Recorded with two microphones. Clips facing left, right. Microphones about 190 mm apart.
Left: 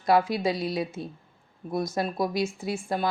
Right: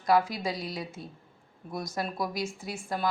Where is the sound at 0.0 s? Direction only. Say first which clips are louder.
Left 3 dB; 25° left (ahead or behind).